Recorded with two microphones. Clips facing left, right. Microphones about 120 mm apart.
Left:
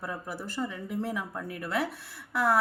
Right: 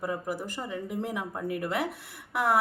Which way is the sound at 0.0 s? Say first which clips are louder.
Right 5 dB; 15° right (ahead or behind).